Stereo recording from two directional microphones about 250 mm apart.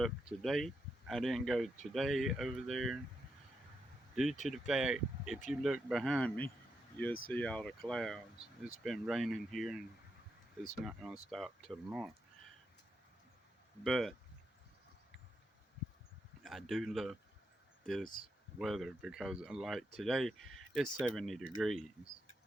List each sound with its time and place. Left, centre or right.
0.0 s speech: centre
4.1 s speech: centre
10.8 s speech: centre
13.8 s speech: centre
16.4 s speech: centre
18.0 s speech: left
18.6 s speech: centre